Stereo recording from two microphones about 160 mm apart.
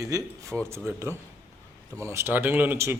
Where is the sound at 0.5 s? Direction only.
Centre (ahead or behind).